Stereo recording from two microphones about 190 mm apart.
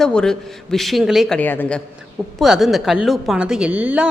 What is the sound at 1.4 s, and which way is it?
Speech, 10° left (ahead or behind).